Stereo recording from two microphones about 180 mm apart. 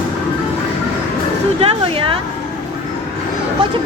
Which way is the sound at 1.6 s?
30° right (ahead or behind).